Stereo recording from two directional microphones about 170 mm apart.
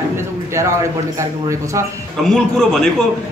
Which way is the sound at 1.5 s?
20° right (ahead or behind).